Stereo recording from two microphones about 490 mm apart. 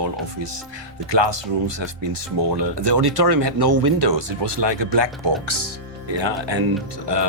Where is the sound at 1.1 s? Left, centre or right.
Right.